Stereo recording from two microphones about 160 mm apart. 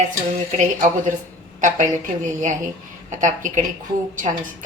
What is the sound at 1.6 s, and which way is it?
A woman's voice, 50° right (ahead or behind).